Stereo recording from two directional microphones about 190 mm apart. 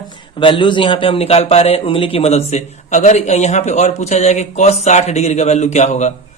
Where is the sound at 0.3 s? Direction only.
25° left (ahead or behind).